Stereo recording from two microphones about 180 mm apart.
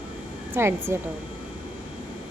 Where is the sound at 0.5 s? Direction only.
15° right (ahead or behind).